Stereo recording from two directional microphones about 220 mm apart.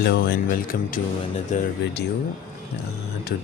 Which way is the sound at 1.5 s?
35° left (ahead or behind).